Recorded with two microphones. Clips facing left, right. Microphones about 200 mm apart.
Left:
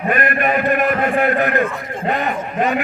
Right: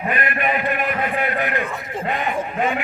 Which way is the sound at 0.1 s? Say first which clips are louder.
Left 5 dB; 45° left (ahead or behind).